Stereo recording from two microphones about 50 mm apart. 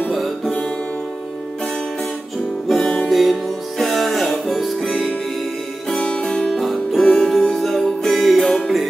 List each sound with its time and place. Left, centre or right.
2.7 s music: centre
6.0 s music: centre
6.5 s music: centre